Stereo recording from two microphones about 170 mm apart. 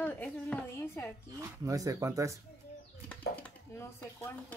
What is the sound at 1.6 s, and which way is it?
Speech, 20° right (ahead or behind).